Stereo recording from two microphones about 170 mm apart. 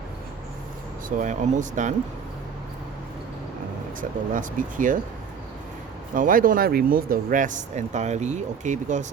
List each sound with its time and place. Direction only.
1.2 s speech: 45° right (ahead or behind)
4.4 s speech: 50° right (ahead or behind)
6.1 s speech: 55° right (ahead or behind)